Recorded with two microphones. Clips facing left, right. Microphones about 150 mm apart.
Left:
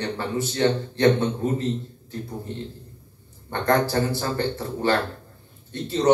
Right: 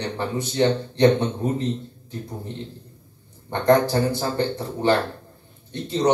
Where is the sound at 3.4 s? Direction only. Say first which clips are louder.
Right 4 dB; 20° right (ahead or behind).